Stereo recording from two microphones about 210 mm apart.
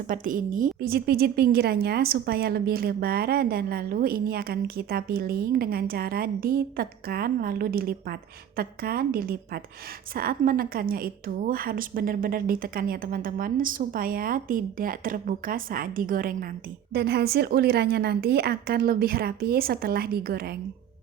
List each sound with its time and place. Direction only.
0.1 s a woman's voice: 40° right (ahead or behind)